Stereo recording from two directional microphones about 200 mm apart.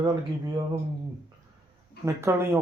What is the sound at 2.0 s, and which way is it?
Speech, 10° right (ahead or behind).